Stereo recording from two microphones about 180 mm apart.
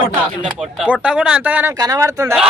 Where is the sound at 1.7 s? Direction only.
20° right (ahead or behind).